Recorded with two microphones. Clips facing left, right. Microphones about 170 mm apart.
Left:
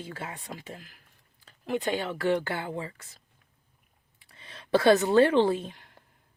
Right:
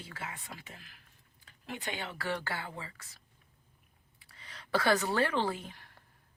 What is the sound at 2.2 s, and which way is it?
Speech, 25° left (ahead or behind).